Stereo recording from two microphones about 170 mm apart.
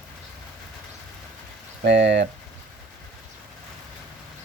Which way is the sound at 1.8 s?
90° right.